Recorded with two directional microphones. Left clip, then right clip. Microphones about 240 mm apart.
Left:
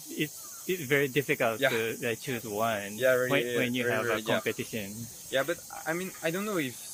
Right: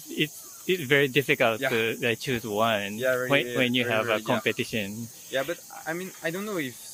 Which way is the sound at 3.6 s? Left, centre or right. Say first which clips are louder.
Right 4 dB; right.